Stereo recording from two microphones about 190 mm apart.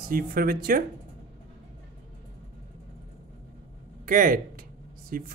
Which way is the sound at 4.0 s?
45° right (ahead or behind).